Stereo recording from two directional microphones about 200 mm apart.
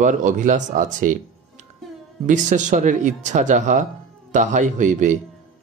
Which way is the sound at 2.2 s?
40° right (ahead or behind).